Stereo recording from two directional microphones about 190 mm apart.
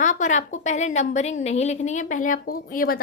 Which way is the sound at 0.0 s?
40° left (ahead or behind).